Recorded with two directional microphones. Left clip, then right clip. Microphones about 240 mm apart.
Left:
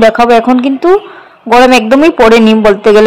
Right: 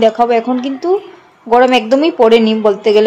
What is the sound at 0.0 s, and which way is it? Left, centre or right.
Speech, centre.